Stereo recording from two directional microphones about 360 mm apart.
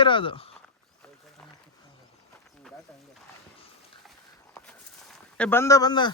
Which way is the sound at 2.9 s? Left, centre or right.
Centre.